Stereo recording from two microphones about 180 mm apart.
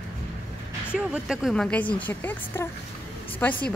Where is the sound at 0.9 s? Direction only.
5° right (ahead or behind).